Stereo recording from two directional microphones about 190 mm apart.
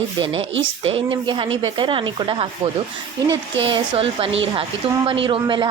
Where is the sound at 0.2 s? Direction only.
30° right (ahead or behind).